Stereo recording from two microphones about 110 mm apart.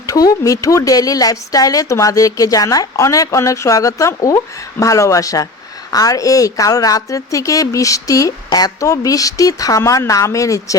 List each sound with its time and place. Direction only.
0.1 s a woman's voice: 30° left (ahead or behind)